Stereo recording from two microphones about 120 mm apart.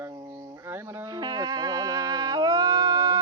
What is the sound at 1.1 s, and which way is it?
Music, 35° right (ahead or behind).